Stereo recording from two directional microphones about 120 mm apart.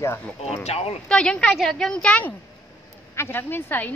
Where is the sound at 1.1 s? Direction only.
10° left (ahead or behind).